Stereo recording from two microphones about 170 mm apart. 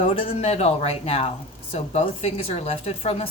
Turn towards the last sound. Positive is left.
turn(degrees=35)  # may be behind; listen again after turning